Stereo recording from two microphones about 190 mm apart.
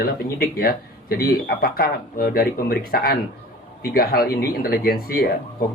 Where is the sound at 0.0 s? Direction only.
50° left (ahead or behind).